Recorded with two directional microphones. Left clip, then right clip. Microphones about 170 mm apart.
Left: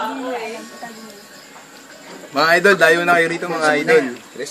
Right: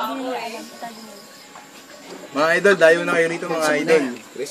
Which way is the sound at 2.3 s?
45° left (ahead or behind).